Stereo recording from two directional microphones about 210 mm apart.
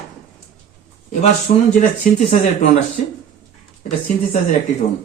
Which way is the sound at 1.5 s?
35° left (ahead or behind).